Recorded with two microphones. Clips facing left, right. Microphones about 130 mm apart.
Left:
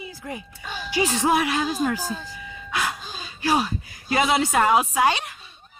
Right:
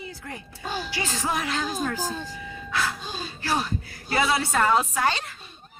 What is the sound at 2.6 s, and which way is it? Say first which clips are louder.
Ice cream truck: left 1 dB; 15° left (ahead or behind).